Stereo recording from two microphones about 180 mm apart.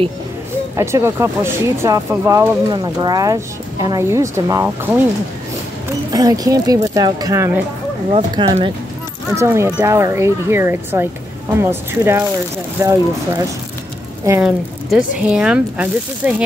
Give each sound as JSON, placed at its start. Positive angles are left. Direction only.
{"t": 0.7, "sound": "speech", "side_deg": -15}
{"t": 6.1, "sound": "speech", "side_deg": -20}
{"t": 8.1, "sound": "speech", "side_deg": -30}
{"t": 9.3, "sound": "speech", "side_deg": -15}
{"t": 14.4, "sound": "speech", "side_deg": -5}